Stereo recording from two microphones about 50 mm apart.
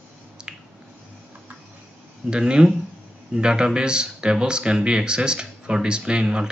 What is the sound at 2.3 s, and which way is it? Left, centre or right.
Speech, centre.